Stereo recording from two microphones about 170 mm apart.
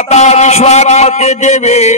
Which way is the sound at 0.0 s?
40° left (ahead or behind).